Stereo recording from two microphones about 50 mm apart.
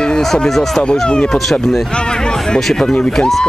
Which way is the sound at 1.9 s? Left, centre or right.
Centre.